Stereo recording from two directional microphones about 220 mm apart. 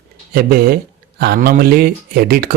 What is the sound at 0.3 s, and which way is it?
Speech, 45° right (ahead or behind).